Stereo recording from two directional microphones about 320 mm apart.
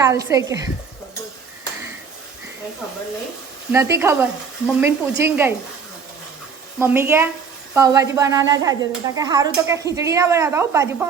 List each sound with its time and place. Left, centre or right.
0.0 s speech: centre
3.7 s speech: centre
6.7 s speech: centre